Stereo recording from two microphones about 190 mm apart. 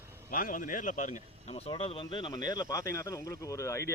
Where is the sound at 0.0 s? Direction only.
15° right (ahead or behind).